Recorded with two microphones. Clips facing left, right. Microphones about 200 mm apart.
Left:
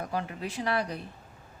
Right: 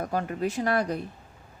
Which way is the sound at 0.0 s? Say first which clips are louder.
Right 5 dB; 45° right (ahead or behind).